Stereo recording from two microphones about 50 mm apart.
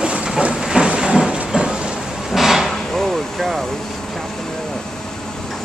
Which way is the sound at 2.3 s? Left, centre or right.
Centre.